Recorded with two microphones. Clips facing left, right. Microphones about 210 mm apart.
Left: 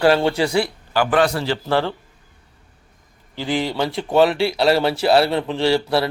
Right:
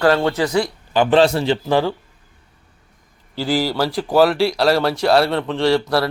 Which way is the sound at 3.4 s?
5° right (ahead or behind).